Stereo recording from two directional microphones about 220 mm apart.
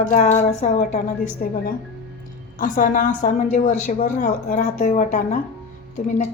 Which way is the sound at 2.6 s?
40° left (ahead or behind).